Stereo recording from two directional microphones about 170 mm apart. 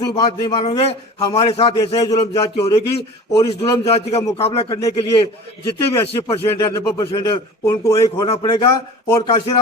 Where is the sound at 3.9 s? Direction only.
35° left (ahead or behind).